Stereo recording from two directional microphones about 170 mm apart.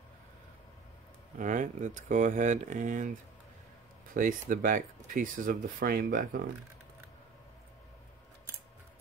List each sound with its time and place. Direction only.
1.4 s speech: 45° right (ahead or behind)